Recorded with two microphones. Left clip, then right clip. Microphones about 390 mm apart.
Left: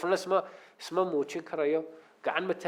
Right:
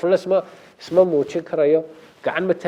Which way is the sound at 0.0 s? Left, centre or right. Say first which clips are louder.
Right 10 dB; right.